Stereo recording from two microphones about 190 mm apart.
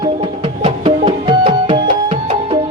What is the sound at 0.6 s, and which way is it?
Music, 25° right (ahead or behind).